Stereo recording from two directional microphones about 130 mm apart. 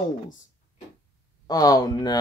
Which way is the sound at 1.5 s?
30° left (ahead or behind).